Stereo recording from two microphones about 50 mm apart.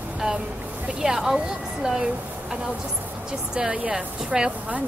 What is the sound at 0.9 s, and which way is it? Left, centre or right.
Speech, centre.